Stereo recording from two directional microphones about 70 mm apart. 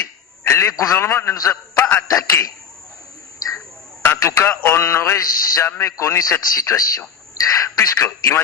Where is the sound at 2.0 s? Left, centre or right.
Left.